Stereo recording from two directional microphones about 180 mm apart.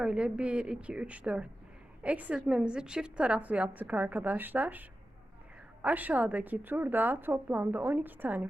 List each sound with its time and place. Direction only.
0.0 s a woman's voice: 5° right (ahead or behind)